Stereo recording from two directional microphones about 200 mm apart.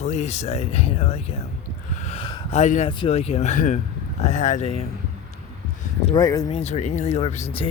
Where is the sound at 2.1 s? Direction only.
30° left (ahead or behind).